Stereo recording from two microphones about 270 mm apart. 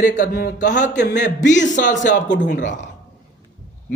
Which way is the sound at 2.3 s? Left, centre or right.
Left.